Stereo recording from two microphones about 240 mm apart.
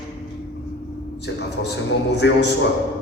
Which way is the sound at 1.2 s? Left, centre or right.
Left.